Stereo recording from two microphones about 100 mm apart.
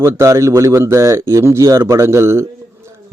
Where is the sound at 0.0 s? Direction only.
30° right (ahead or behind).